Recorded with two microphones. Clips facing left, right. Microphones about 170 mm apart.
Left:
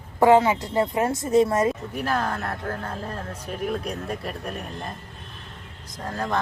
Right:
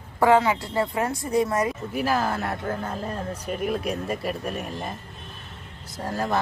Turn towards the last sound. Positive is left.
turn(degrees=-5)  # may be behind; listen again after turning